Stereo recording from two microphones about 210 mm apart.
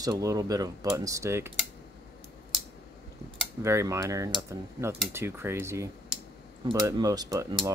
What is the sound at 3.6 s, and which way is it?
Speech, 15° right (ahead or behind).